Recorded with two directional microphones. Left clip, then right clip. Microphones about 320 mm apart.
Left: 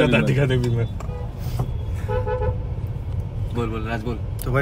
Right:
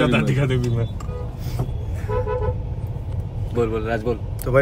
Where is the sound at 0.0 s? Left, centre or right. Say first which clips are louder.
Left 1 dB; centre.